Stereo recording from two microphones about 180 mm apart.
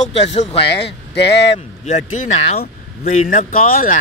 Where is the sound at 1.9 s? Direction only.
40° left (ahead or behind).